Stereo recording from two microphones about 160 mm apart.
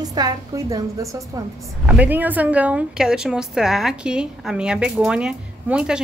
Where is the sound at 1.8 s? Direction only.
10° right (ahead or behind).